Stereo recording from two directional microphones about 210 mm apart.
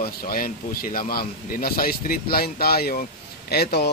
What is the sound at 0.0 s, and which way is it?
Speech, 45° left (ahead or behind).